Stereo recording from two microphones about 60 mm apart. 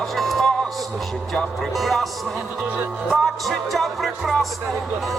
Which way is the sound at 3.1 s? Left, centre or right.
Centre.